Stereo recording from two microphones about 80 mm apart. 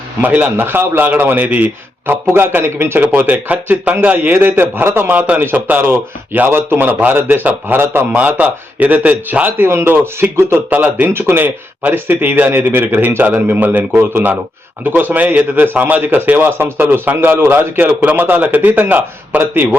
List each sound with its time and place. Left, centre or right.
0.2 s a man's voice: right
3.0 s a man's voice: centre